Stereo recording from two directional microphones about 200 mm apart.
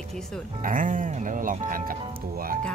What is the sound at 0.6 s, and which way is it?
Speech, 40° right (ahead or behind).